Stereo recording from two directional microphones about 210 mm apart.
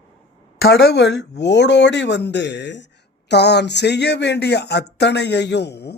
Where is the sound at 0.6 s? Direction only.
50° left (ahead or behind).